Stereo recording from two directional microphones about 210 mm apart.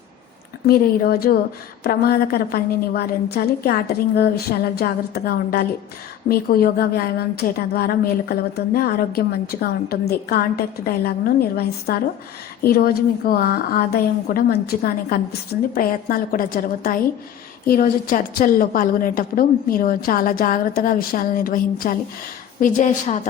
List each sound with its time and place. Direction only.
0.7 s a woman's voice: 45° left (ahead or behind)